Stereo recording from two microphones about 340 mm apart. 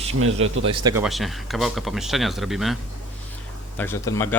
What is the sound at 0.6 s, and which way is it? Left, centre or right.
Speech, centre.